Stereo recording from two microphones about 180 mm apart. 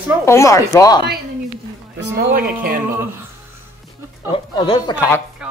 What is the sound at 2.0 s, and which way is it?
Speech, 55° right (ahead or behind).